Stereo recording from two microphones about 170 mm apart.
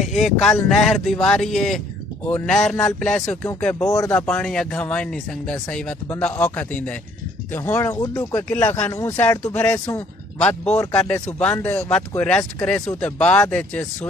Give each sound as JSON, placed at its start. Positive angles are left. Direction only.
{"t": 0.0, "sound": "speech", "side_deg": 0}
{"t": 3.8, "sound": "speech", "side_deg": 20}
{"t": 4.3, "sound": "speech", "side_deg": 5}